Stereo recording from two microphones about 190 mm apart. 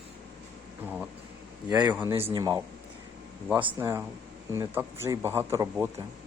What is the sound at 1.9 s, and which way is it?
Speech, 10° right (ahead or behind).